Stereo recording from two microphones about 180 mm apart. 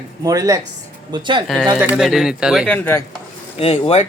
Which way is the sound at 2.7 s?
15° left (ahead or behind).